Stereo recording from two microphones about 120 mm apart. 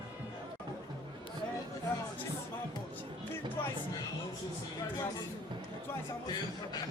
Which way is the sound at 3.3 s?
15° left (ahead or behind).